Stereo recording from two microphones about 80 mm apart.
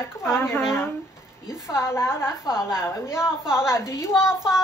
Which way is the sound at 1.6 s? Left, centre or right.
Left.